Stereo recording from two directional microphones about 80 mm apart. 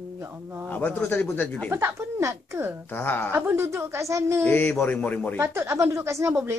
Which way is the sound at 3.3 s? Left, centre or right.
Right.